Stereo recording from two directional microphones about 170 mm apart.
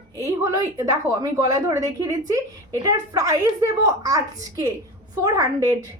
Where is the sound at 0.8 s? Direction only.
20° right (ahead or behind).